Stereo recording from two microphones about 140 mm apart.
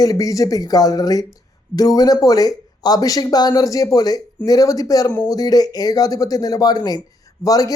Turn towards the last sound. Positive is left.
turn(degrees=25)  # may be behind; listen again after turning